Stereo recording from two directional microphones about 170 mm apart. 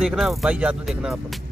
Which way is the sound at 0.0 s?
Centre (ahead or behind).